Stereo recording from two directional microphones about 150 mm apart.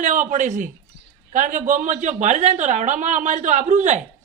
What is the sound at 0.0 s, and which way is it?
A woman's voice, 55° right (ahead or behind).